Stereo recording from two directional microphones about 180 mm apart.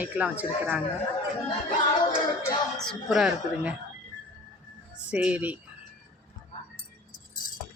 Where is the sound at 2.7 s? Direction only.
5° left (ahead or behind).